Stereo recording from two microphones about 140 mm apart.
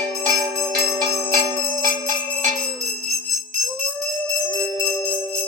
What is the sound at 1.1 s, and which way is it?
Bicycle bell, 25° right (ahead or behind).